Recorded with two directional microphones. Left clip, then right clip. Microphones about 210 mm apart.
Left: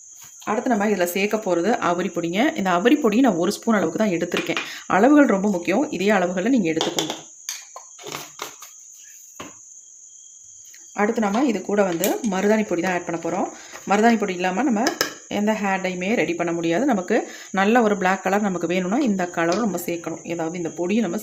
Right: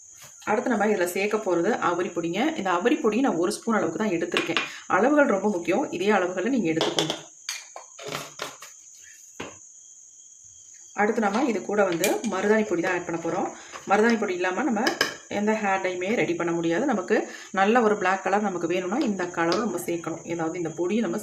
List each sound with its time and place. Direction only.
0.4 s speech: 30° left (ahead or behind)
10.9 s speech: 35° left (ahead or behind)